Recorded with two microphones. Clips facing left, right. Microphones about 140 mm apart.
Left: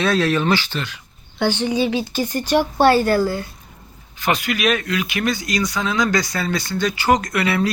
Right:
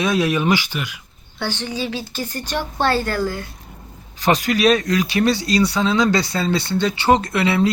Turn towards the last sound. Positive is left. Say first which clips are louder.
# right 2 dB
turn(degrees=-25)  # may be behind; listen again after turning